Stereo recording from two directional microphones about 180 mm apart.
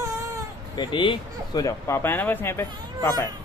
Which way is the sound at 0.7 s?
25° left (ahead or behind).